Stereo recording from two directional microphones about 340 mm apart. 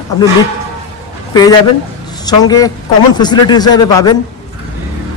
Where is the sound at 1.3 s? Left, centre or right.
Centre.